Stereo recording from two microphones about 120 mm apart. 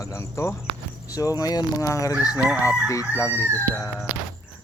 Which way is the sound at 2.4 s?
10° right (ahead or behind).